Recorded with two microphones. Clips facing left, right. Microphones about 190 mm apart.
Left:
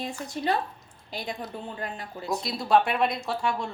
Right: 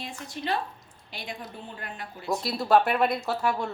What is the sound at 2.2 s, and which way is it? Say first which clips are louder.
Speech: right 3 dB; centre (ahead or behind).